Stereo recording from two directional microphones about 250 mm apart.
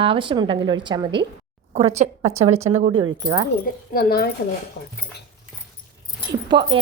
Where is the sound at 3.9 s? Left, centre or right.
Left.